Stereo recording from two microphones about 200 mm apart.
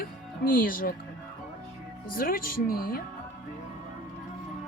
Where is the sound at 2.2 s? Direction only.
45° left (ahead or behind).